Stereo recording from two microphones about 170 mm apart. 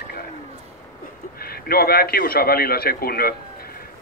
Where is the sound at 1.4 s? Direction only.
65° left (ahead or behind).